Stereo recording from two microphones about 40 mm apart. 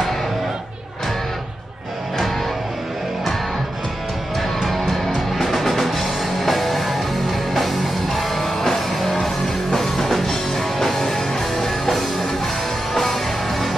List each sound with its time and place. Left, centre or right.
4.4 s music: centre